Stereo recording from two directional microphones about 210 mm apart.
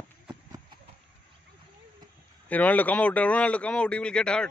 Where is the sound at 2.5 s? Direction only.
5° left (ahead or behind).